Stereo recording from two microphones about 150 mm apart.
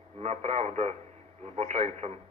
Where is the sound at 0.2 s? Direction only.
45° right (ahead or behind).